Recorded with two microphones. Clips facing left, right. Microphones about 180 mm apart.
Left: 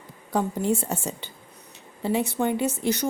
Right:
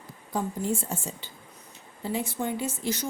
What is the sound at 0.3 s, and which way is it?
A woman's voice, 70° left (ahead or behind).